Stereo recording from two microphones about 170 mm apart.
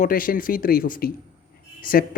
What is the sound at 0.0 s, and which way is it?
Speech, 55° left (ahead or behind).